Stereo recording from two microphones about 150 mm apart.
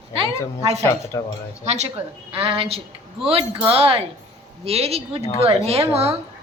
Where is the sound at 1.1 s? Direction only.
20° left (ahead or behind).